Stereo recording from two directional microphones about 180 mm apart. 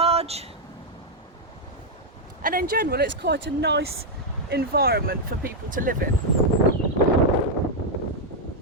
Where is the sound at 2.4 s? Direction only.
55° right (ahead or behind); by 3.9 s 70° right (ahead or behind).